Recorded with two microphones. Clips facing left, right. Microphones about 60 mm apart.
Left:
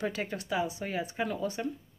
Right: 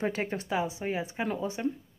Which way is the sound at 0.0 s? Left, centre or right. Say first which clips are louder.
Right 3 dB; right.